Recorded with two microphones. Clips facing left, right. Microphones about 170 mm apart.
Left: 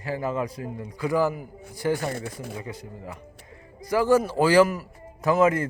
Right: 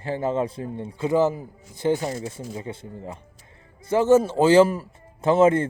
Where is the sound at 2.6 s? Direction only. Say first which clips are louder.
Right 3 dB; 25° right (ahead or behind).